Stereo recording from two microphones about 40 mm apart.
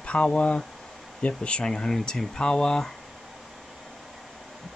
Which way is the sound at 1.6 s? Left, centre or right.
Centre.